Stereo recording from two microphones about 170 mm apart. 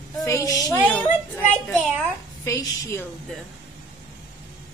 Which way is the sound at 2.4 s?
20° left (ahead or behind).